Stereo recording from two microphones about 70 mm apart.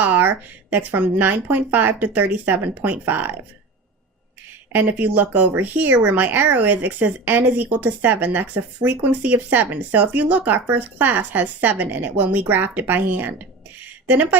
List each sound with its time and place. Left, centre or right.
0.0 s speech: right
4.7 s speech: right
13.8 s a sound: right